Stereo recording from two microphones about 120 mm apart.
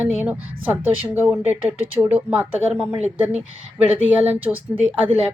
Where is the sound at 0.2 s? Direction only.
15° right (ahead or behind).